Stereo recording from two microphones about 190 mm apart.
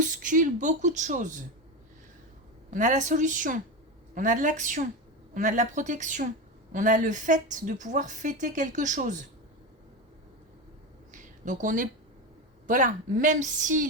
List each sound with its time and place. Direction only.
0.0 s a woman's voice: 45° right (ahead or behind)
2.6 s a woman's voice: 40° right (ahead or behind)
11.1 s a sound: 40° right (ahead or behind)
12.6 s a woman's voice: 45° right (ahead or behind)